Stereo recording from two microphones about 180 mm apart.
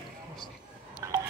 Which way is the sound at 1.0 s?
15° right (ahead or behind).